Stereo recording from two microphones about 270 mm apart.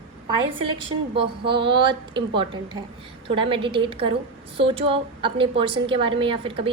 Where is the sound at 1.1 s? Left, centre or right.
Centre.